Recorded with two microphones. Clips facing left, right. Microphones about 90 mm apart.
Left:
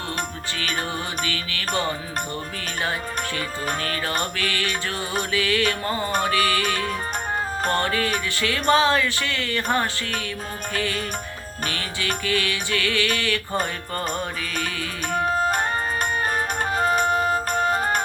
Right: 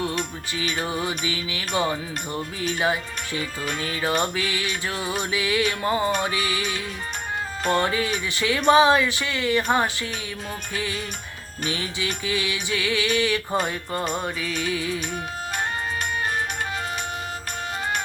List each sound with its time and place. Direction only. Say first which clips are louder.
0.2 s music: even; 45° left (ahead or behind)
1.0 s speech: right 1 dB; 15° right (ahead or behind)
3.3 s music: right 3 dB; 50° left (ahead or behind)
4.2 s speech: right 1 dB; 15° right (ahead or behind)
6.4 s music: left 5 dB; 45° left (ahead or behind)
7.9 s speech: left 1 dB; 15° right (ahead or behind)
10.8 s speech: left 4 dB; 15° right (ahead or behind)
15.1 s music: left 8 dB; 45° left (ahead or behind)